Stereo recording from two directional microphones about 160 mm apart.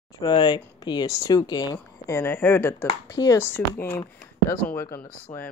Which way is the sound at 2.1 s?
10° left (ahead or behind).